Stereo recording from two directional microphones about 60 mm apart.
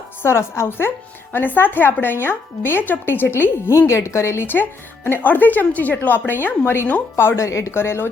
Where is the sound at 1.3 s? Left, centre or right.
Left.